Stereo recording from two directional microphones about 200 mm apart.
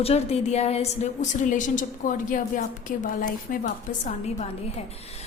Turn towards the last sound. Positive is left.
turn(degrees=40)  # may be behind; listen again after turning